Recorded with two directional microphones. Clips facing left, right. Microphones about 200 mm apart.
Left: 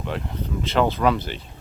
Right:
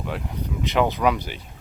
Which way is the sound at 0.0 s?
10° right (ahead or behind).